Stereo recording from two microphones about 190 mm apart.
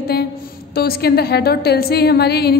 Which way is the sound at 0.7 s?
55° left (ahead or behind).